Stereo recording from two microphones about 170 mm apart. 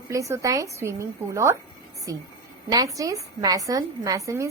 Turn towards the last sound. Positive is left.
turn(degrees=-20)  # may be behind; listen again after turning